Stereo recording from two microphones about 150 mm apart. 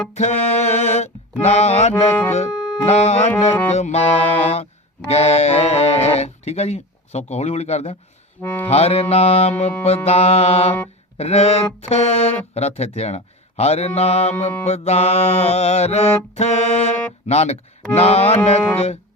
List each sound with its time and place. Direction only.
0.1 s music: 50° left (ahead or behind)
1.9 s music: 10° left (ahead or behind)
2.3 s music: 50° left (ahead or behind)